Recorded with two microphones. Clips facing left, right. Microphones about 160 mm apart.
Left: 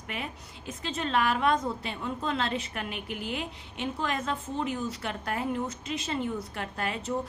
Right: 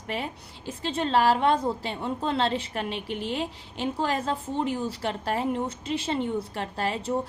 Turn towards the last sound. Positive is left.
turn(degrees=-30)  # may be behind; listen again after turning